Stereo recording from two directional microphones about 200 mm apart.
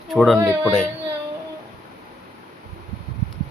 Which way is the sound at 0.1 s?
Centre (ahead or behind).